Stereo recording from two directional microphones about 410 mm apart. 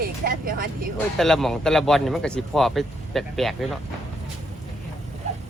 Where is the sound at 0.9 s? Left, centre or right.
Centre.